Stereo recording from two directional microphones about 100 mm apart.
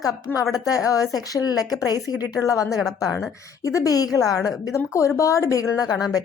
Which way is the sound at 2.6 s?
Centre (ahead or behind).